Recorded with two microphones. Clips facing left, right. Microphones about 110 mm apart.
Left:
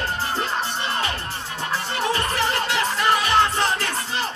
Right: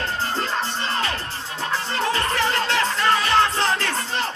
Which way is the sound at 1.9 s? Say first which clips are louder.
Right 1 dB; 20° left (ahead or behind).